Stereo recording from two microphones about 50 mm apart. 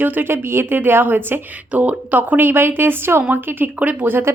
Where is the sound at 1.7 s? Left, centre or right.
Right.